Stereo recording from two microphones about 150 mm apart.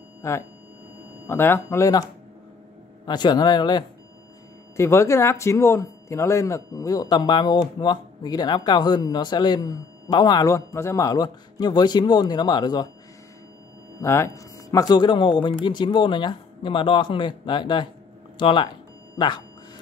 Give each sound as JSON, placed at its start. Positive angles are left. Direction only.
{"t": 0.2, "sound": "speech", "side_deg": 20}
{"t": 3.1, "sound": "speech", "side_deg": 30}
{"t": 14.0, "sound": "speech", "side_deg": 20}